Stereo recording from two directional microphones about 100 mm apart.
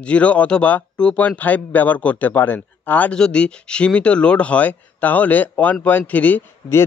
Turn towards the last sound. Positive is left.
turn(degrees=25)  # may be behind; listen again after turning